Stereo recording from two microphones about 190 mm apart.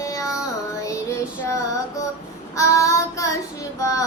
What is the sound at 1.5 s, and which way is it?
Female singing, 15° left (ahead or behind).